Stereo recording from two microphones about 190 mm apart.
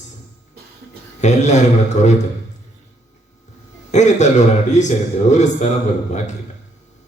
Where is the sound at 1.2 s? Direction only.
40° left (ahead or behind).